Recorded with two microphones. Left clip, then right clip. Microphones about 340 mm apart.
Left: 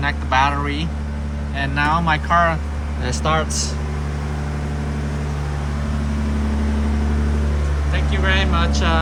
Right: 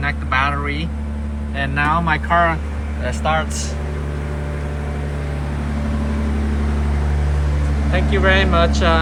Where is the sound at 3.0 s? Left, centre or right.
Left.